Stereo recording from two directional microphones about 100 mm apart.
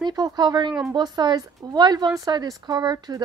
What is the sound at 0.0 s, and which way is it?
Speech, 45° right (ahead or behind).